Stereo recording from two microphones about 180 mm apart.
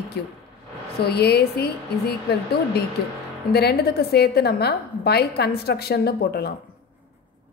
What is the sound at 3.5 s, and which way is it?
A woman's voice, 60° left (ahead or behind).